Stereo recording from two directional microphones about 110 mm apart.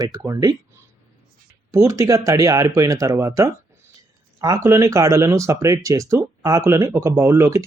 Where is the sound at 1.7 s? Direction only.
30° right (ahead or behind).